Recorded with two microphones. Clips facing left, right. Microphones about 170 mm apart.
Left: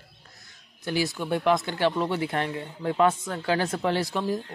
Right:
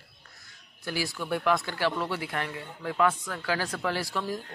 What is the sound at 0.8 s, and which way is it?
Speech, 20° left (ahead or behind).